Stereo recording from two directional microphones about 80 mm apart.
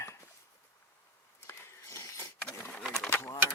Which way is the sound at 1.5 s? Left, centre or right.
Left.